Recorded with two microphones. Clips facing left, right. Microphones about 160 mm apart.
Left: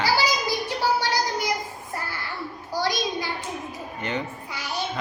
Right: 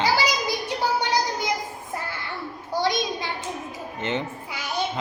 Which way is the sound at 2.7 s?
25° right (ahead or behind).